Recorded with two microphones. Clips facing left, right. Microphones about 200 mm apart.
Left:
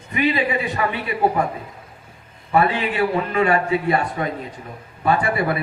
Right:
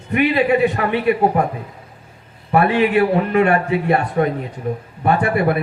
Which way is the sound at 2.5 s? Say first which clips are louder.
Right 5 dB; 60° right (ahead or behind).